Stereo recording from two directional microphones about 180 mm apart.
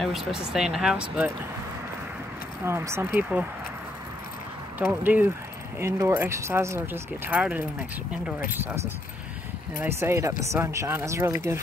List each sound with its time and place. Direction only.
0.0 s speech: centre (ahead or behind)
2.6 s speech: 15° right (ahead or behind)
5.0 s speech: 10° right (ahead or behind)
9.8 s speech: 15° right (ahead or behind)